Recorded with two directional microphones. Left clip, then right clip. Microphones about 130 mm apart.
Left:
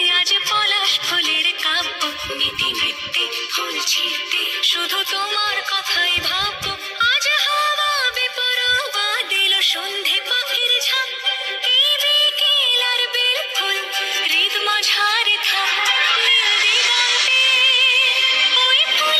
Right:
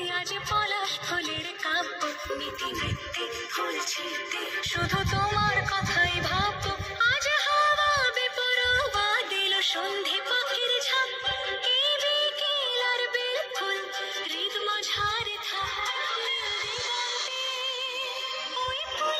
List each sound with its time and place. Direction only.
0.0 s music: 20° left (ahead or behind)